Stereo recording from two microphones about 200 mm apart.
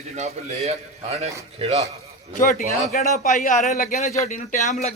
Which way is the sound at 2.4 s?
40° left (ahead or behind).